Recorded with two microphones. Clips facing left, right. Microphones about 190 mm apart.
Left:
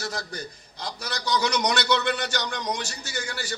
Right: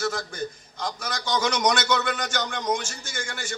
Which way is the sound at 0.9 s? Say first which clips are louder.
Right 1 dB; 35° left (ahead or behind).